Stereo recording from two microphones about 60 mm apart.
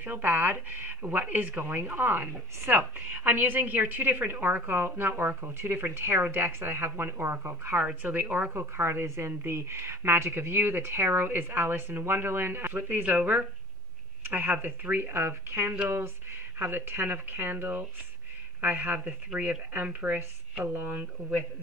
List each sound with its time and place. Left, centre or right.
0.0 s a woman's voice: right